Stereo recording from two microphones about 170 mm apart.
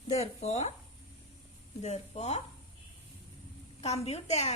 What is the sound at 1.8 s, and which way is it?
Speech, 40° left (ahead or behind).